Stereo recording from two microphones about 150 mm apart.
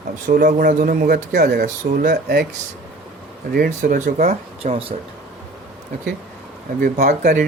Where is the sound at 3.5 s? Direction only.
85° right.